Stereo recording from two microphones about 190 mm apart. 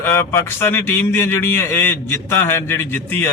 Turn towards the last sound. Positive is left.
turn(degrees=10)  # may be behind; listen again after turning